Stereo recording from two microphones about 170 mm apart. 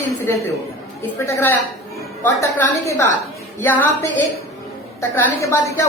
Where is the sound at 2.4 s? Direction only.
20° left (ahead or behind).